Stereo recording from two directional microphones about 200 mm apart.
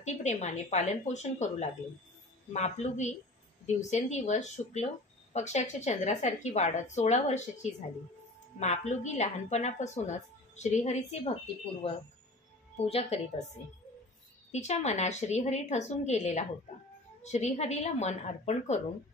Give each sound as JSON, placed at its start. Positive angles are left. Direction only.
{"t": 0.0, "sound": "a woman's voice", "side_deg": 35}
{"t": 8.5, "sound": "a woman's voice", "side_deg": 35}
{"t": 12.7, "sound": "a woman's voice", "side_deg": 30}
{"t": 14.5, "sound": "a woman's voice", "side_deg": 35}